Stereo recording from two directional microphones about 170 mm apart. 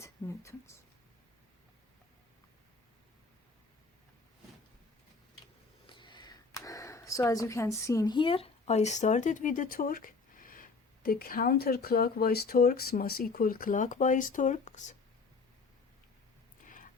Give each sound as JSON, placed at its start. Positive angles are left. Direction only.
{"t": 0.0, "sound": "speech", "side_deg": 15}
{"t": 5.8, "sound": "speech", "side_deg": 30}